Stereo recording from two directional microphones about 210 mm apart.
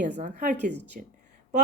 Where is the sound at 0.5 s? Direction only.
55° right (ahead or behind).